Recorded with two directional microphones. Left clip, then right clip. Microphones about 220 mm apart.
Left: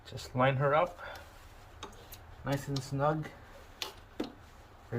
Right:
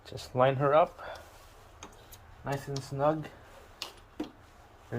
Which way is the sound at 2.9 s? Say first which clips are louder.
Right 3 dB; 30° right (ahead or behind).